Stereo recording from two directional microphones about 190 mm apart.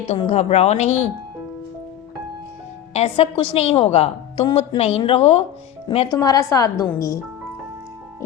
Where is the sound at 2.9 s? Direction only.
30° left (ahead or behind).